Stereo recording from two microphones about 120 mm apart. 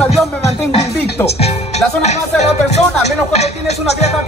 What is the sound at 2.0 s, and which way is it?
Music, 70° left (ahead or behind).